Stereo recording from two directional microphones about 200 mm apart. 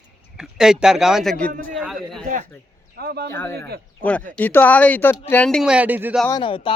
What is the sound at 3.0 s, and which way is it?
Speech, 50° right (ahead or behind).